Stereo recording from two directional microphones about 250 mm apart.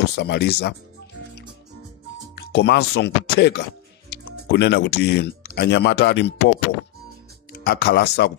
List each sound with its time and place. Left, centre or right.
0.1 s speech: left
2.3 s speech: left
7.6 s speech: left